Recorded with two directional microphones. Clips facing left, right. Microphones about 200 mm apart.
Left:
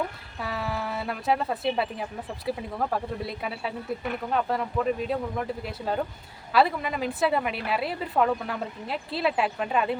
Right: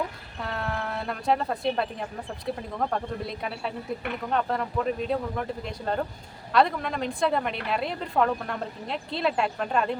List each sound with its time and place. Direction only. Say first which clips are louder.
0.3 s a woman's voice: even; 5° left (ahead or behind)